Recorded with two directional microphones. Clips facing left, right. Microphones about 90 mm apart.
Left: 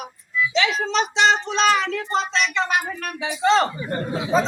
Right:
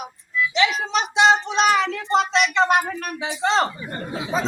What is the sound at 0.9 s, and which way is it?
Music, 10° right (ahead or behind).